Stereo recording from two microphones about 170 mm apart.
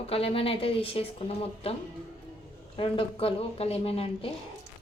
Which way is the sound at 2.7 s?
30° left (ahead or behind).